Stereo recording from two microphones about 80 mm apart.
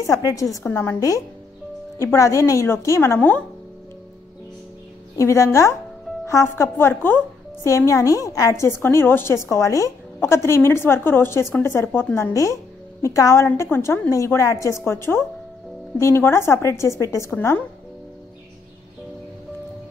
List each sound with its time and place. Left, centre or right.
0.0 s a woman's voice: left
5.1 s a woman's voice: left
7.6 s a woman's voice: left